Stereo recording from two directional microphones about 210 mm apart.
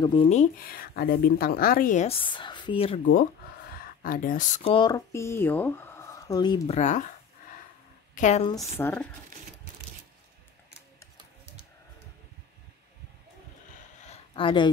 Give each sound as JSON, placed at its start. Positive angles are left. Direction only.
{"t": 0.0, "sound": "speech", "side_deg": 25}
{"t": 2.2, "sound": "a woman's voice", "side_deg": 20}
{"t": 3.7, "sound": "speech", "side_deg": 40}
{"t": 4.7, "sound": "speech", "side_deg": 20}
{"t": 6.8, "sound": "speech", "side_deg": 35}
{"t": 8.1, "sound": "a woman's voice", "side_deg": 35}
{"t": 8.7, "sound": "speech", "side_deg": 10}
{"t": 14.0, "sound": "a sound", "side_deg": 25}